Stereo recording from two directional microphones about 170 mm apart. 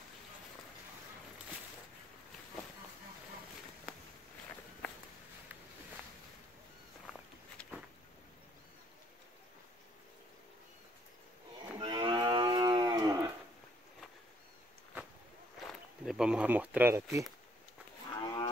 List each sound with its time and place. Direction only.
11.8 s cattle: 25° right (ahead or behind)
15.6 s speech: centre (ahead or behind); by 17.3 s 15° right (ahead or behind)
18.1 s cattle: 25° left (ahead or behind)